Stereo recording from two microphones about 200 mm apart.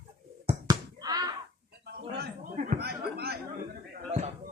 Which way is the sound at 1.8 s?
50° right (ahead or behind).